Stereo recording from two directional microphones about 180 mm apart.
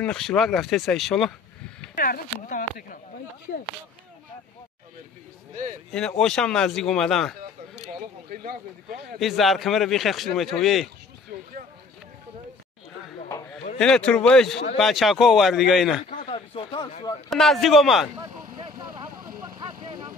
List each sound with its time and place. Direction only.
0.0 s a man's voice: 5° left (ahead or behind)
2.0 s speech: 45° left (ahead or behind)
5.9 s a man's voice: 5° left (ahead or behind)
8.3 s speech: 55° right (ahead or behind)
9.2 s a man's voice: centre (ahead or behind)
13.7 s a man's voice: 5° left (ahead or behind)
16.1 s a sound: 45° left (ahead or behind)
16.3 s a sound: 25° left (ahead or behind)
17.3 s a man's voice: centre (ahead or behind)
18.1 s vehicle: 20° right (ahead or behind)